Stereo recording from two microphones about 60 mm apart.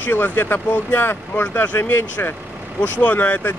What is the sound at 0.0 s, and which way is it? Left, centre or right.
Speech, left.